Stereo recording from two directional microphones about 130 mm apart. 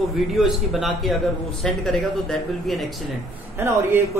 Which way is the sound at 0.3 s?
Centre (ahead or behind).